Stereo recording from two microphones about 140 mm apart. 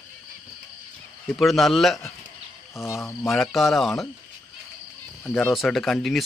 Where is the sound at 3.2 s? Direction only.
Centre (ahead or behind).